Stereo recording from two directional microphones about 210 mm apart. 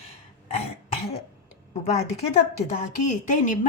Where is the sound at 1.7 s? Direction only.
30° left (ahead or behind).